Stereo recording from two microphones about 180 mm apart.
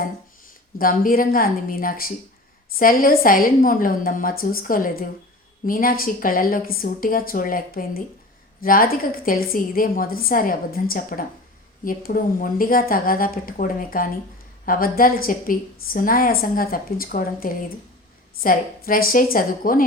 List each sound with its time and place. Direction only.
0.8 s a woman's voice: 50° left (ahead or behind)